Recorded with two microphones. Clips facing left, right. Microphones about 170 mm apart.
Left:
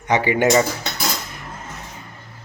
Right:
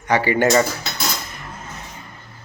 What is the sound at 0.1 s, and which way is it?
Speech, 20° left (ahead or behind).